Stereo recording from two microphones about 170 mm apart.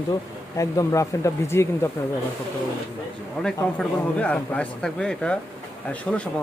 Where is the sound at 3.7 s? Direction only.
5° left (ahead or behind).